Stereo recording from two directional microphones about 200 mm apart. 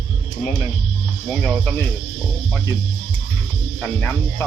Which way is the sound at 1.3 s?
5° left (ahead or behind).